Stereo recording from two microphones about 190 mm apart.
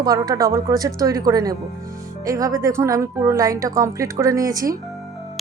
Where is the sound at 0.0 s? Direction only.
20° right (ahead or behind).